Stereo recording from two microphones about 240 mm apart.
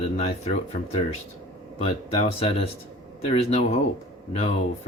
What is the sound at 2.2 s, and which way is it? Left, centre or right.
Speech, left.